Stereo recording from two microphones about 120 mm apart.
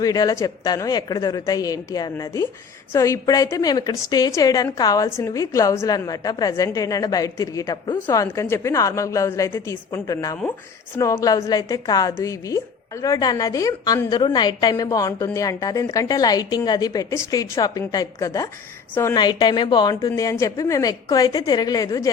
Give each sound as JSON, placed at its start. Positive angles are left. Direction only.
{"t": 0.0, "sound": "a woman's voice", "side_deg": 30}
{"t": 19.1, "sound": "a woman's voice", "side_deg": 40}
{"t": 20.1, "sound": "a woman's voice", "side_deg": 25}